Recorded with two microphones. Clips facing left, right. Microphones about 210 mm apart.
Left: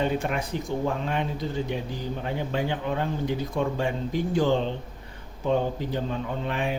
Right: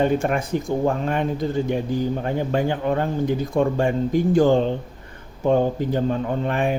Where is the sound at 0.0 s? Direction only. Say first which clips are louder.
Right 6 dB; 50° right (ahead or behind).